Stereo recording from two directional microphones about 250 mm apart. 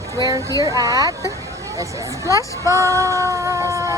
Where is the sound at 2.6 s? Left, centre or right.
Centre.